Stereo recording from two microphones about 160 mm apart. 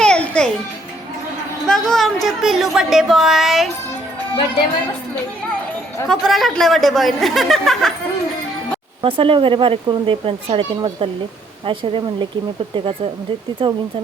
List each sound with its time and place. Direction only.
0.0 s music: 5° left (ahead or behind)
1.6 s speech: 5° left (ahead or behind)
6.1 s speech: centre (ahead or behind)
9.0 s speech: 35° right (ahead or behind)